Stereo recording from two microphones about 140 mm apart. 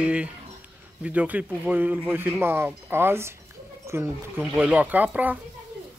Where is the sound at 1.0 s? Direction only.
10° right (ahead or behind).